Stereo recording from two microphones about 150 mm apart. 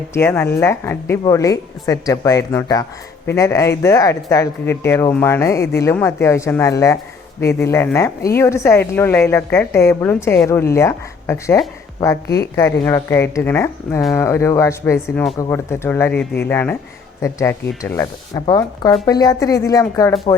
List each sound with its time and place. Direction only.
0.1 s a woman's voice: 15° left (ahead or behind)
18.3 s speech: 30° left (ahead or behind)
20.3 s speech: 35° left (ahead or behind)